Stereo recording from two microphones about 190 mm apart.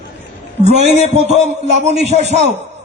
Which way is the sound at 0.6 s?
35° right (ahead or behind).